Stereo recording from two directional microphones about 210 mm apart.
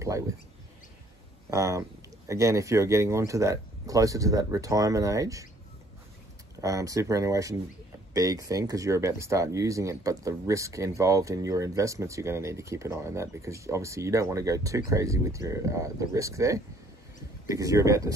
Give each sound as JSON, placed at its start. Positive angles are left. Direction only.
{"t": 1.5, "sound": "speech", "side_deg": -15}
{"t": 6.6, "sound": "speech", "side_deg": -15}